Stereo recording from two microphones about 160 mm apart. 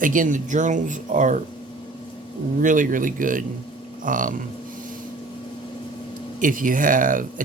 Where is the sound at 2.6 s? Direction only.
55° right (ahead or behind).